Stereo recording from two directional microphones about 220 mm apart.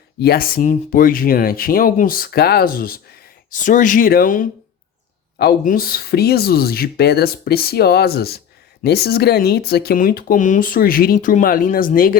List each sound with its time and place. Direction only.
0.2 s speech: 45° left (ahead or behind)